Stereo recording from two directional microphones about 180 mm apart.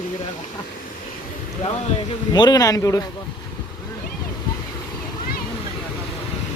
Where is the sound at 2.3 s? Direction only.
20° left (ahead or behind).